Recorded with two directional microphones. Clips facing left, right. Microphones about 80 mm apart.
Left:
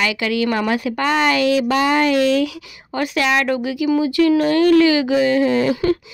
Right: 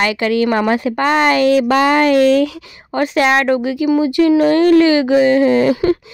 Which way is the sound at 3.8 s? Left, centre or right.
Right.